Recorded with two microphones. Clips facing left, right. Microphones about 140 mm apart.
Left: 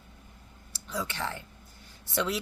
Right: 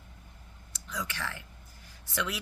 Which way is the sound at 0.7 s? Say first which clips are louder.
Left 3 dB; 30° left (ahead or behind).